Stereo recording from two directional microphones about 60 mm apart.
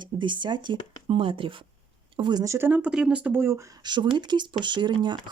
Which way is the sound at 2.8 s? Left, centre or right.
Centre.